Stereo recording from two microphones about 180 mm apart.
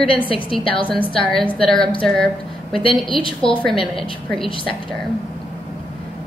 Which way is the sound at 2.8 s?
30° left (ahead or behind).